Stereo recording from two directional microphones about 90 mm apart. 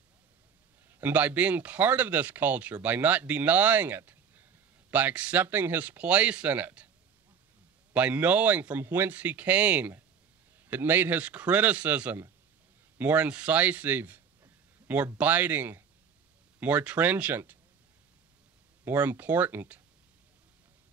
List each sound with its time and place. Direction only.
0.8 s speech: 20° right (ahead or behind)
7.9 s speech: 15° right (ahead or behind)
18.9 s speech: 20° right (ahead or behind)